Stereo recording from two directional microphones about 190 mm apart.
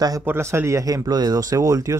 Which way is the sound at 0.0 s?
15° right (ahead or behind).